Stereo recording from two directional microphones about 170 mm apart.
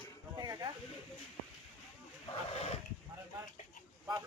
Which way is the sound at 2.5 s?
35° left (ahead or behind).